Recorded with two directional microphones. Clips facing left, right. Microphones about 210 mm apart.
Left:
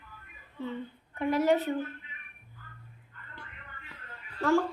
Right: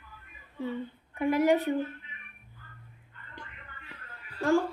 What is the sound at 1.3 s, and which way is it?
Speech, 10° right (ahead or behind).